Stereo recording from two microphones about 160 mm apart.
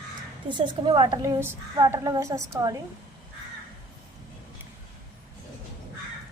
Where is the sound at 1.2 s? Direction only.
15° right (ahead or behind).